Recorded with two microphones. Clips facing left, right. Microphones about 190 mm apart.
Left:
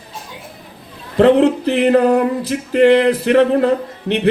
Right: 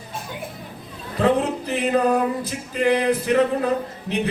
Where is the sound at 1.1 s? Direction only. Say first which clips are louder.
Left 9 dB; 70° left (ahead or behind).